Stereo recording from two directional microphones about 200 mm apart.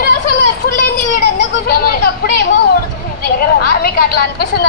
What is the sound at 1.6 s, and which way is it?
Speech, 50° left (ahead or behind).